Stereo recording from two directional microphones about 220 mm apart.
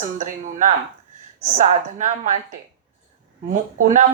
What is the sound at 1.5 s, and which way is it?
Speech, 35° right (ahead or behind).